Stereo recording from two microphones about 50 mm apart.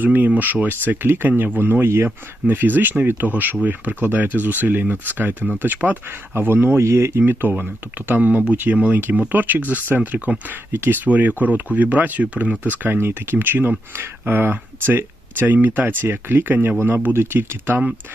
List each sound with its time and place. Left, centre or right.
0.0 s speech: right
6.3 s speech: right
6.8 s speech: right
7.2 s speech: right
10.7 s speech: right
13.9 s speech: right